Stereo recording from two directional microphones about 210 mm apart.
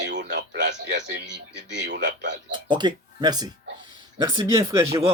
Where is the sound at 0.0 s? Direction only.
55° right (ahead or behind).